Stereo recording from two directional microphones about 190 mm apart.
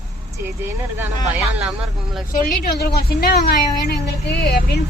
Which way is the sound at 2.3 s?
55° left (ahead or behind).